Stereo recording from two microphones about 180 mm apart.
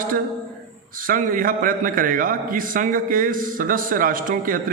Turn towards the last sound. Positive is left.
turn(degrees=-50)  # may be behind; listen again after turning